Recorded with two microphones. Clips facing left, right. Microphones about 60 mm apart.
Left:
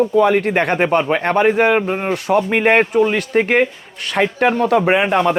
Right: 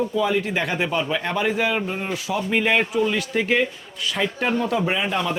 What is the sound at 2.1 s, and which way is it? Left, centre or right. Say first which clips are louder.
A man's voice: left 8 dB; left.